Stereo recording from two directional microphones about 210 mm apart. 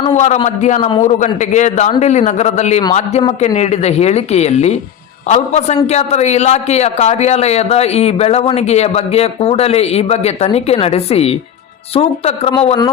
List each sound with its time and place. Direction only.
0.1 s a man's voice: 35° left (ahead or behind)
0.8 s a man's voice: 20° left (ahead or behind)
1.0 s a man's voice: 35° left (ahead or behind)